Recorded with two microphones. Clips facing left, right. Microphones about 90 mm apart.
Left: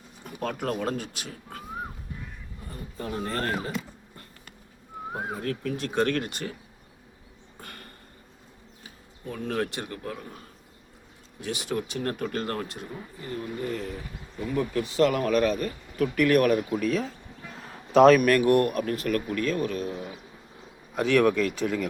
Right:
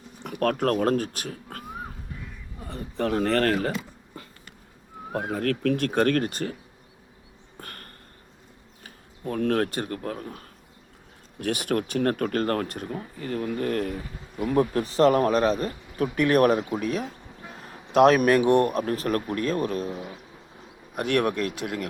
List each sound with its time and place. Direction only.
0.3 s speech: 60° right (ahead or behind)
2.6 s speech: 85° right
5.1 s speech: 70° right (ahead or behind); by 6.6 s 40° right (ahead or behind)
7.6 s a sound: 50° right (ahead or behind)
8.8 s speech: 55° right (ahead or behind)
11.3 s speech: 55° right (ahead or behind)
14.4 s speech: 45° right (ahead or behind); by 16.9 s 20° right (ahead or behind)
18.3 s speech: 25° right (ahead or behind)
20.9 s speech: 10° right (ahead or behind)